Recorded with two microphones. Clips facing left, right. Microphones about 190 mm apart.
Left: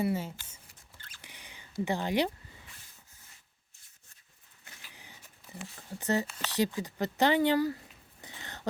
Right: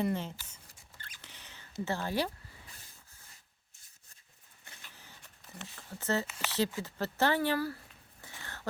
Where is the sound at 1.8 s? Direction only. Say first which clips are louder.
Left 4 dB; 15° left (ahead or behind).